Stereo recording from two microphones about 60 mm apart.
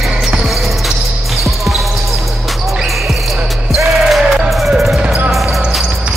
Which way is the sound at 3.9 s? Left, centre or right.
Centre.